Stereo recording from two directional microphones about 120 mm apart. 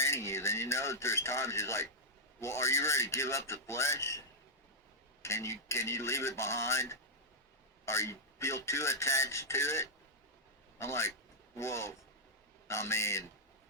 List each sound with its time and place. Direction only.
0.0 s speech: 25° left (ahead or behind)
5.2 s a man's voice: 25° left (ahead or behind)